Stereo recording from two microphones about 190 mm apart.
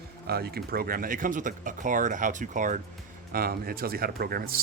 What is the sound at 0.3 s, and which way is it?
A man's voice, 55° right (ahead or behind).